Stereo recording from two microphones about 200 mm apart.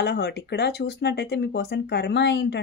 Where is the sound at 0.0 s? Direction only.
55° left (ahead or behind).